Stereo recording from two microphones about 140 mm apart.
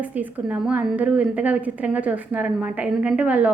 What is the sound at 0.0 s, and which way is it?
A woman's voice, 10° right (ahead or behind).